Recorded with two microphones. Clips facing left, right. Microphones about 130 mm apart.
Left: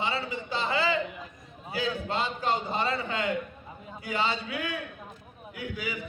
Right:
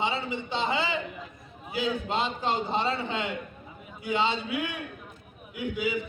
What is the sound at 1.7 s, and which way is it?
A man's voice, 20° right (ahead or behind).